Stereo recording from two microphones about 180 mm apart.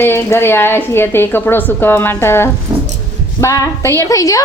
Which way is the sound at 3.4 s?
15° left (ahead or behind).